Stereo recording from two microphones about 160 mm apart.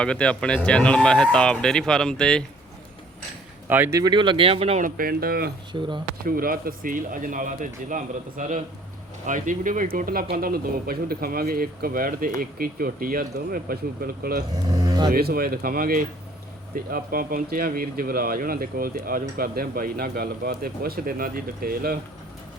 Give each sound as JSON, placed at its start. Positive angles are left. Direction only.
{"t": 0.0, "sound": "speech", "side_deg": 5}
{"t": 3.7, "sound": "speech", "side_deg": -15}
{"t": 4.8, "sound": "speech", "side_deg": -65}
{"t": 5.7, "sound": "speech", "side_deg": -30}
{"t": 6.2, "sound": "speech", "side_deg": -65}
{"t": 14.5, "sound": "speech", "side_deg": -25}
{"t": 15.1, "sound": "speech", "side_deg": -70}